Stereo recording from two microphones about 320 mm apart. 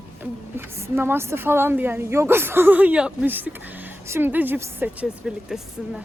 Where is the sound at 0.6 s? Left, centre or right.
Centre.